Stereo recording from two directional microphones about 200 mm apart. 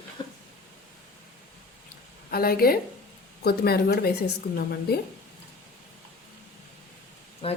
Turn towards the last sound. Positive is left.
turn(degrees=30)  # may be behind; listen again after turning